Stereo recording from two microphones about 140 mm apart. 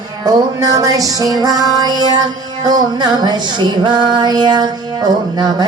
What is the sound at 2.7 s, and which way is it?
Female singing, 30° right (ahead or behind).